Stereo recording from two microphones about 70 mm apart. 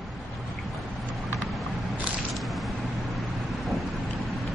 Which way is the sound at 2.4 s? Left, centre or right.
Centre.